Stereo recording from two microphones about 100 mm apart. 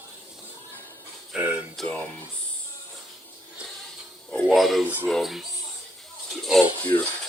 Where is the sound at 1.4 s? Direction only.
20° right (ahead or behind).